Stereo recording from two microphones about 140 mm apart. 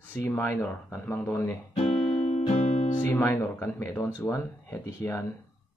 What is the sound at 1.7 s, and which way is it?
Music, 50° left (ahead or behind).